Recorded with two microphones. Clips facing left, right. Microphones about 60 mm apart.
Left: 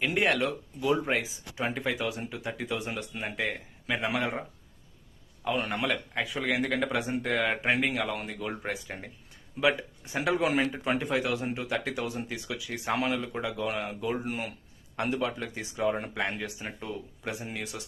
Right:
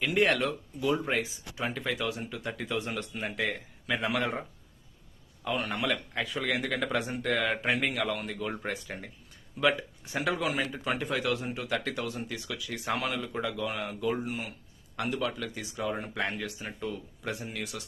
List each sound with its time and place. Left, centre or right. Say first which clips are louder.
0.2 s a man's voice: right 2 dB; centre
1.5 s a man's voice: left 2 dB; left
2.5 s a man's voice: even; centre
5.5 s speech: left 1 dB; left
5.8 s a man's voice: left 1 dB; centre
10.2 s speech: left 4 dB; left
11.7 s a man's voice: right 2 dB; centre
13.1 s a man's voice: left 1 dB; centre
14.3 s speech: left 2 dB; left
16.8 s a man's voice: right 2 dB; centre
17.3 s speech: left 1 dB; left